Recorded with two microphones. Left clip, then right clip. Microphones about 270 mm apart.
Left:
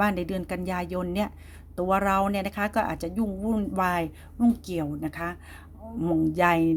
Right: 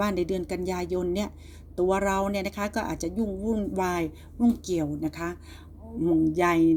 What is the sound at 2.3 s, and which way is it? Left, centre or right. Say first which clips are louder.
Speech: left 2 dB; left.